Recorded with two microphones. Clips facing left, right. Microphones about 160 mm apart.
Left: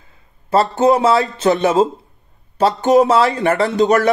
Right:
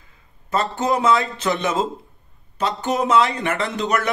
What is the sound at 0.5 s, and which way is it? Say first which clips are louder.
A man's voice: left 8 dB; 30° left (ahead or behind).